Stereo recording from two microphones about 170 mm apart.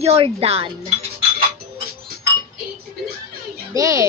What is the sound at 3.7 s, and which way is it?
Speech, 20° right (ahead or behind).